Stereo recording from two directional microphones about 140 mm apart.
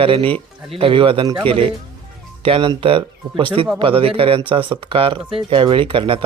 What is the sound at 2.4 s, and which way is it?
Speech, 40° right (ahead or behind).